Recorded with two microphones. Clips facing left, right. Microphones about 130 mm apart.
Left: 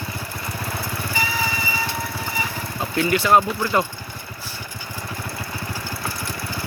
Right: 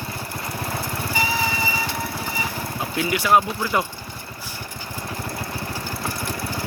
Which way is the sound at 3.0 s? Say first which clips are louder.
Left 2 dB; 10° right (ahead or behind).